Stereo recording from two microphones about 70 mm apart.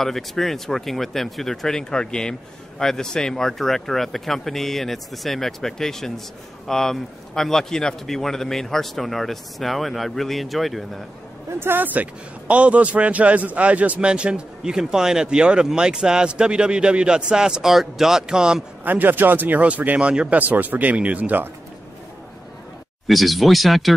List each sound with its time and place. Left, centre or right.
0.0 s a man's voice: centre
11.6 s a man's voice: right; by 18.6 s centre
18.9 s speech: right
23.0 s a man's voice: centre